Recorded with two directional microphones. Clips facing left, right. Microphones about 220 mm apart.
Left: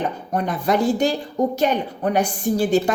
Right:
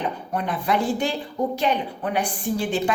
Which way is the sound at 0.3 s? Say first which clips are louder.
Left 4 dB; 45° left (ahead or behind).